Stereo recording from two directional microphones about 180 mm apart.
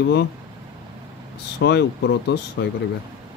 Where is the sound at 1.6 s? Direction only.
75° left (ahead or behind).